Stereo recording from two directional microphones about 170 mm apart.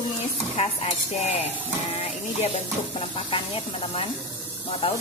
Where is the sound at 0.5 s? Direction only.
35° left (ahead or behind).